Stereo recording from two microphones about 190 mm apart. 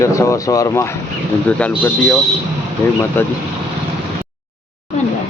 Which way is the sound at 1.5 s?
5° left (ahead or behind).